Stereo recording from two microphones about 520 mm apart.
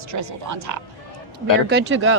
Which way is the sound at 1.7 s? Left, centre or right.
Centre.